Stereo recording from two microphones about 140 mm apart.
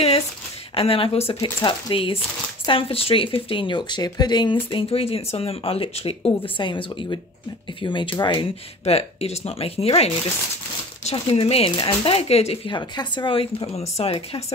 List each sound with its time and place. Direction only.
0.7 s speech: 40° left (ahead or behind)
1.4 s speech: 35° left (ahead or behind)
8.8 s speech: 50° left (ahead or behind)
11.2 s speech: 45° left (ahead or behind)
12.7 s speech: 30° left (ahead or behind)